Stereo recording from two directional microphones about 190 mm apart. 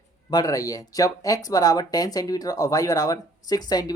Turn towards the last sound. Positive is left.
turn(degrees=20)  # may be behind; listen again after turning